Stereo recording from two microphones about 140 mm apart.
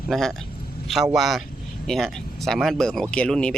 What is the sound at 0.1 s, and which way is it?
Speech, 5° left (ahead or behind).